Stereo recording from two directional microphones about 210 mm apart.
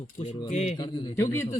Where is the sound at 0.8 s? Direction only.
20° left (ahead or behind).